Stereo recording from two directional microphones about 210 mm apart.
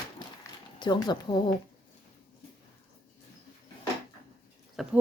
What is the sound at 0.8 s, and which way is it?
Speech, 20° left (ahead or behind).